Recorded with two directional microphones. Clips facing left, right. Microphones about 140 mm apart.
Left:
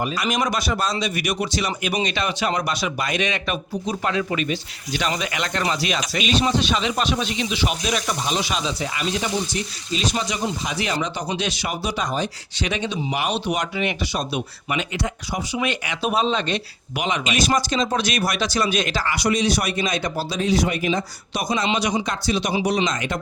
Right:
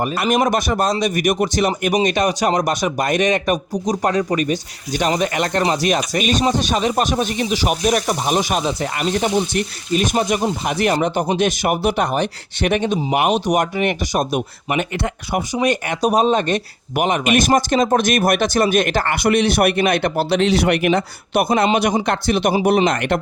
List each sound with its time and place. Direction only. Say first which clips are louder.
0.0 s speech: right 6 dB; 55° right (ahead or behind)
15.5 s speech: right 6 dB; 45° right (ahead or behind); by 23.2 s 65° right (ahead or behind)